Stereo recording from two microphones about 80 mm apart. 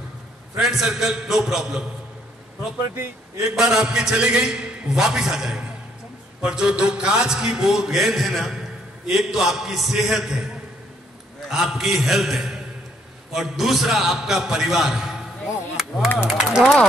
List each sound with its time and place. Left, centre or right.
0.6 s a man's voice: centre
3.5 s a man's voice: centre